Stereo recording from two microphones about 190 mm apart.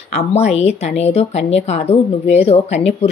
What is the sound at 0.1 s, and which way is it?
Speech, 35° left (ahead or behind).